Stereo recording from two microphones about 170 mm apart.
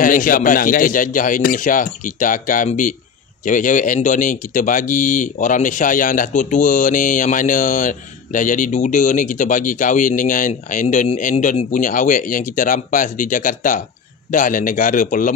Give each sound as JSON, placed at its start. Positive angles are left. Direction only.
{"t": 0.0, "sound": "speech", "side_deg": 55}